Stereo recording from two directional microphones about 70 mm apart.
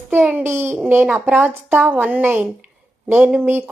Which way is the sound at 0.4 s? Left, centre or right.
Right.